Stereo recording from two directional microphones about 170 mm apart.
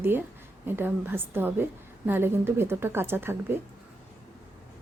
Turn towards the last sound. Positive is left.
turn(degrees=-15)  # may be behind; listen again after turning